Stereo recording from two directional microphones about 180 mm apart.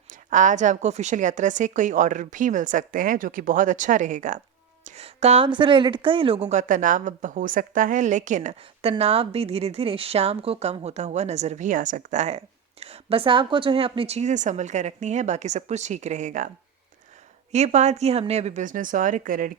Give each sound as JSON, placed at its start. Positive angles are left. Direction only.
{"t": 0.1, "sound": "a woman's voice", "side_deg": -45}
{"t": 4.8, "sound": "a sound", "side_deg": -40}
{"t": 5.5, "sound": "a woman's voice", "side_deg": -25}
{"t": 17.5, "sound": "a woman's voice", "side_deg": -40}